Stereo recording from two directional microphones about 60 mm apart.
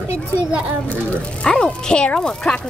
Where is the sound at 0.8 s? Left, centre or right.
Left.